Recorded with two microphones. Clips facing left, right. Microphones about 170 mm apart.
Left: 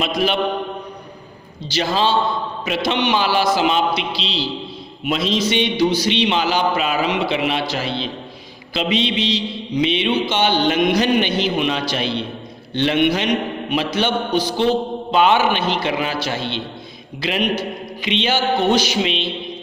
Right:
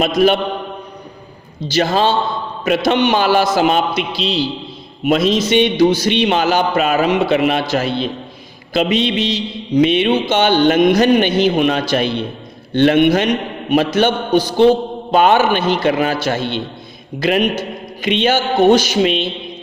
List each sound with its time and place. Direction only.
0.0 s a man's voice: 45° right (ahead or behind)
1.6 s a man's voice: 50° right (ahead or behind)